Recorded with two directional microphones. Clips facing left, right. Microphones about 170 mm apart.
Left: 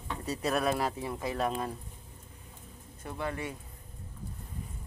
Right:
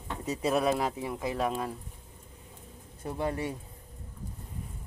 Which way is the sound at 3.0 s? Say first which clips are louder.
Right 4 dB; 35° right (ahead or behind).